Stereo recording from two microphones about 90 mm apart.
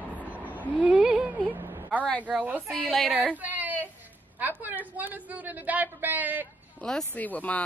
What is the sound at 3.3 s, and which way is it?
Whimper, 20° right (ahead or behind).